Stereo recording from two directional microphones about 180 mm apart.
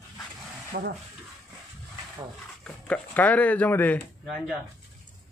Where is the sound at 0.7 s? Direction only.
55° right (ahead or behind).